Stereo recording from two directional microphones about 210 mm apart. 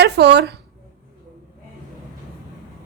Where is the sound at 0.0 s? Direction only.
55° right (ahead or behind).